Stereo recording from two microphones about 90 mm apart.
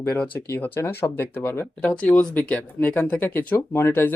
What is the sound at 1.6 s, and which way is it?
Speech, 10° left (ahead or behind).